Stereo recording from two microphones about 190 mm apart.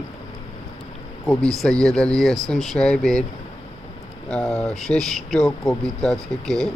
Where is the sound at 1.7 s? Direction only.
20° right (ahead or behind).